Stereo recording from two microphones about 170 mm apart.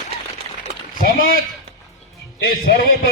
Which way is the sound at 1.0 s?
55° left (ahead or behind).